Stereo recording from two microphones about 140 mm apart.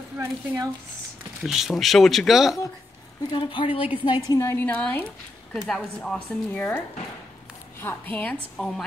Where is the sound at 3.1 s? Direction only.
35° left (ahead or behind).